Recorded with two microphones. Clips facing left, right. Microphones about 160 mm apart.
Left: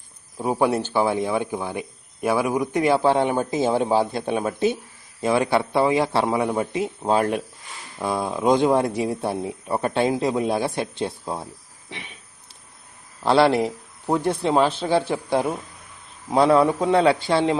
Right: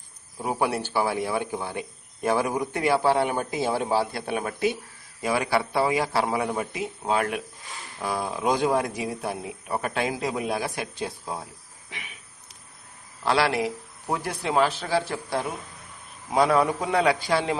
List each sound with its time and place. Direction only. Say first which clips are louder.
0.3 s speech: left 5 dB; 20° left (ahead or behind)
13.5 s a man's voice: left 5 dB; centre (ahead or behind)
14.1 s speech: left 6 dB; 25° left (ahead or behind)
15.0 s a man's voice: left 7 dB; centre (ahead or behind)
16.3 s speech: left 4 dB; 25° left (ahead or behind)